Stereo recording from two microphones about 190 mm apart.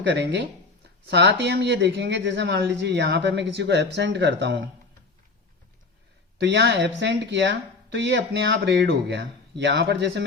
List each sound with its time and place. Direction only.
0.0 s speech: 70° right (ahead or behind)
6.4 s speech: 65° right (ahead or behind)